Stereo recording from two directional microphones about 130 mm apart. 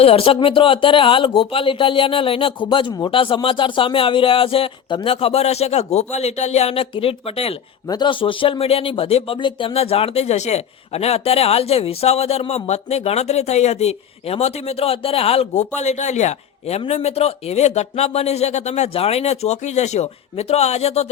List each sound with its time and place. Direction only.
0.0 s a man's voice: 50° left (ahead or behind)
7.9 s a man's voice: 35° left (ahead or behind); by 21.1 s 55° left (ahead or behind)